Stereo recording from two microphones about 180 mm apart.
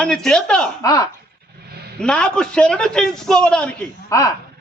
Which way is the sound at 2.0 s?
5° left (ahead or behind).